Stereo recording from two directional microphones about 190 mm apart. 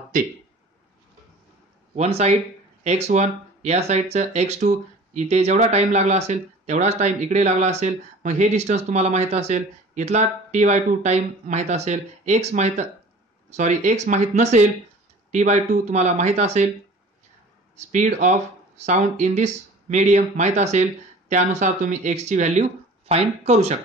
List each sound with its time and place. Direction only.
2.0 s speech: 35° right (ahead or behind)
17.7 s speech: 40° right (ahead or behind)